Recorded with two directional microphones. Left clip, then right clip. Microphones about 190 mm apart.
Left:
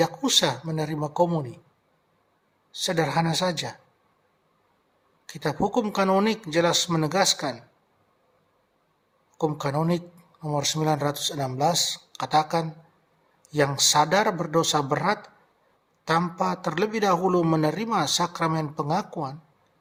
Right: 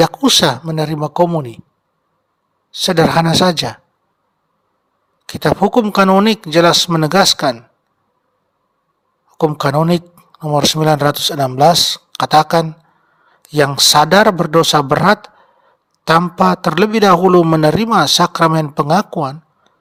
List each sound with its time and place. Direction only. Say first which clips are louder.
0.0 s a man's voice: right 11 dB; 45° right (ahead or behind)
2.7 s a man's voice: right 12 dB; 45° right (ahead or behind)
5.2 s a man's voice: right 13 dB; 45° right (ahead or behind)
9.4 s a man's voice: right 12 dB; 45° right (ahead or behind)